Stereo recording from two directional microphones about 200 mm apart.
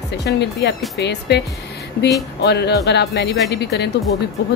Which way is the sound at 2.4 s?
55° left (ahead or behind).